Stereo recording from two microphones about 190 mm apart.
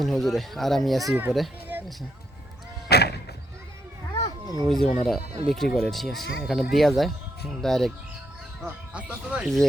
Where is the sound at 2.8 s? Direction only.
60° left (ahead or behind).